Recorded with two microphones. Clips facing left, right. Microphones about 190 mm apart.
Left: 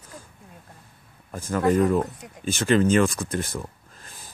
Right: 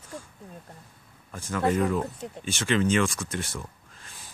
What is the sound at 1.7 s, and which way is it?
Speech, 40° left (ahead or behind).